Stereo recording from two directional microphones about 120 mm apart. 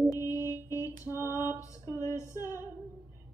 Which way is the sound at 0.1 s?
30° left (ahead or behind).